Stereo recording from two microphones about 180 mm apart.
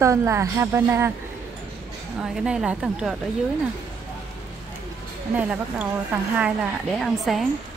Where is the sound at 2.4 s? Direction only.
5° right (ahead or behind).